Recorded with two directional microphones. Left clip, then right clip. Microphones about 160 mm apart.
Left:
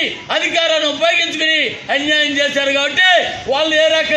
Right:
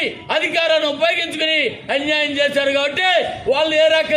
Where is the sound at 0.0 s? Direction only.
25° right (ahead or behind).